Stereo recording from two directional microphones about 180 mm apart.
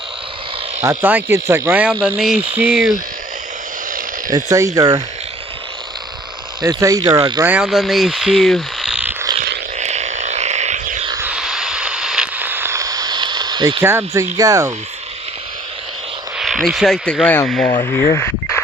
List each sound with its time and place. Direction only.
0.8 s speech: 15° right (ahead or behind)
4.3 s speech: 20° right (ahead or behind)
6.6 s speech: 20° right (ahead or behind)
7.4 s speech: 5° right (ahead or behind)
9.7 s a sound: 40° right (ahead or behind)
11.1 s a sound: 10° right (ahead or behind); by 13.8 s 25° right (ahead or behind)
13.8 s speech: 15° right (ahead or behind)
16.4 s speech: centre (ahead or behind)
17.7 s speech: 20° left (ahead or behind)